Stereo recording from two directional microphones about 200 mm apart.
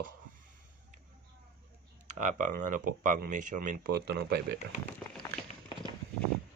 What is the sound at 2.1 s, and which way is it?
Speech, 40° right (ahead or behind).